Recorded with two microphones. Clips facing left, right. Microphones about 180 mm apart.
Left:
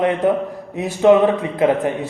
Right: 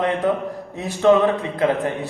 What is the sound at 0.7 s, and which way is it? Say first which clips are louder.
Speech: left 3 dB; 15° left (ahead or behind).